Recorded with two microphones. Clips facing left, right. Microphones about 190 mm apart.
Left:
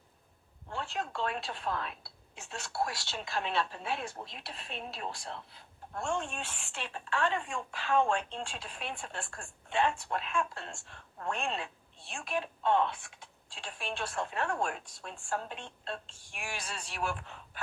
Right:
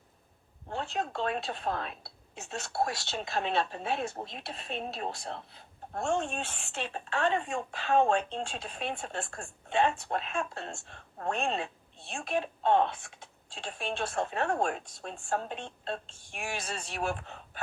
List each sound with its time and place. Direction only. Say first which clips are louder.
0.7 s a woman's voice: right 3 dB; 20° right (ahead or behind)